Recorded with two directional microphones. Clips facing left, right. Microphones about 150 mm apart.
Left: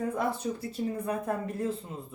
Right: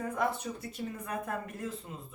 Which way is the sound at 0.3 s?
30° left (ahead or behind).